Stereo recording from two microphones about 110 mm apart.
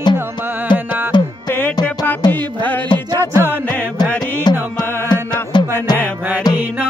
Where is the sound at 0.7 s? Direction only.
50° left (ahead or behind).